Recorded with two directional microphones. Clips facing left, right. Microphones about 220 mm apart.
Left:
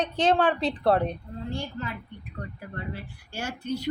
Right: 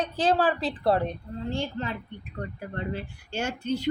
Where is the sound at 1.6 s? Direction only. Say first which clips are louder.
Right 3 dB; 30° right (ahead or behind).